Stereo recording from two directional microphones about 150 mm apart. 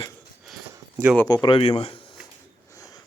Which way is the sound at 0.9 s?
10° right (ahead or behind).